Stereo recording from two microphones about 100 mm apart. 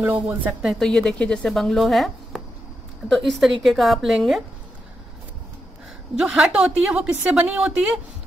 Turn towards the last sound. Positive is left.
turn(degrees=-10)  # may be behind; listen again after turning